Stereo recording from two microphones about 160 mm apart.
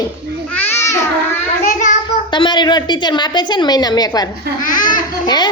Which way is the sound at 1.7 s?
50° left (ahead or behind).